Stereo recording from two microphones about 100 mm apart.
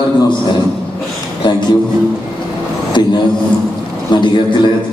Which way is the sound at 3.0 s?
45° left (ahead or behind).